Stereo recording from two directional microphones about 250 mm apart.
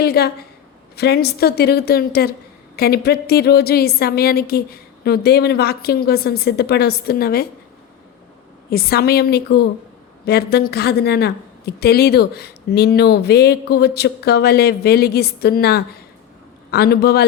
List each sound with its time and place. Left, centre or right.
0.0 s a woman's voice: left
8.7 s a woman's voice: left